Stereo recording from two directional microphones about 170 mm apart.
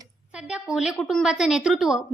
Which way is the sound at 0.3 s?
5° right (ahead or behind).